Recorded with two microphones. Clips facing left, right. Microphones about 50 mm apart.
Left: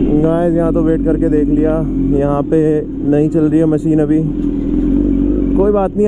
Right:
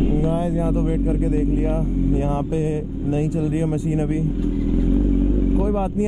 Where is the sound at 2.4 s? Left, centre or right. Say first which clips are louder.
Left 11 dB; left.